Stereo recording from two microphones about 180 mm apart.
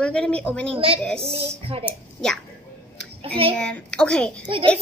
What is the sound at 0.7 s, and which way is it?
Speech, 30° right (ahead or behind).